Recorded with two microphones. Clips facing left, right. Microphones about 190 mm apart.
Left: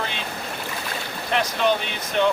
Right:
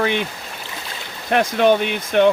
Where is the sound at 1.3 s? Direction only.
55° right (ahead or behind).